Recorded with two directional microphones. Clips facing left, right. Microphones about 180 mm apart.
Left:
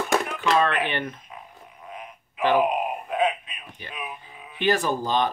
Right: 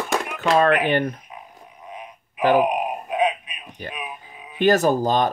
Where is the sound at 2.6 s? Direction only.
15° right (ahead or behind).